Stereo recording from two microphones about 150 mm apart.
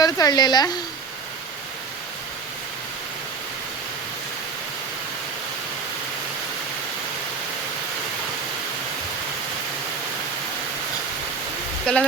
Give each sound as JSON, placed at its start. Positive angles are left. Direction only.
{"t": 0.0, "sound": "a woman's voice", "side_deg": 25}
{"t": 11.9, "sound": "speech", "side_deg": 5}